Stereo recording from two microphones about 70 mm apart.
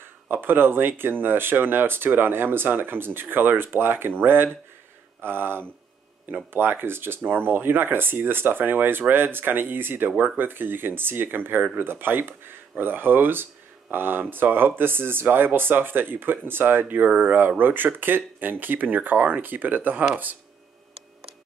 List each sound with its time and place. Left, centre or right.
0.3 s speech: right